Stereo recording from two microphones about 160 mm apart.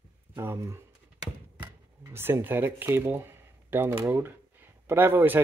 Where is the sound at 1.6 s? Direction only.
15° right (ahead or behind).